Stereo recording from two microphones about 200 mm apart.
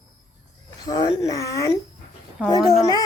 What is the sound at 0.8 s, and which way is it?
Baby cry, 20° left (ahead or behind).